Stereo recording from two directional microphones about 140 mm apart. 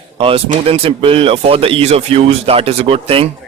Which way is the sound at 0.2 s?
40° right (ahead or behind).